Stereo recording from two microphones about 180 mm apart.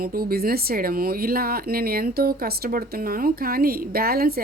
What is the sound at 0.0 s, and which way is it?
Speech, 55° right (ahead or behind).